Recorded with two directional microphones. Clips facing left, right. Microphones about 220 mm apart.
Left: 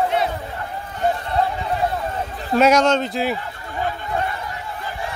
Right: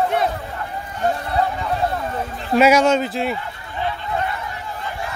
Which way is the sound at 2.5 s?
10° right (ahead or behind).